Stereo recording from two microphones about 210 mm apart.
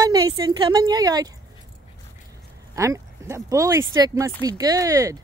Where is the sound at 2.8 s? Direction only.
15° right (ahead or behind).